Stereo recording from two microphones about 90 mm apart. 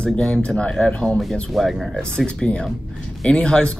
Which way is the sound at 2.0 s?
10° left (ahead or behind).